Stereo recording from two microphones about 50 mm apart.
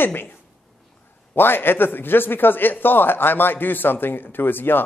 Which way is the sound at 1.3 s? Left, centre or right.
Left.